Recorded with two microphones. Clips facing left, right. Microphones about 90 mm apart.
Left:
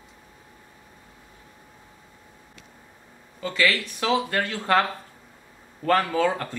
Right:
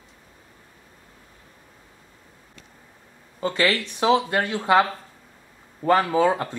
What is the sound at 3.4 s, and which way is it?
Speech, 30° right (ahead or behind).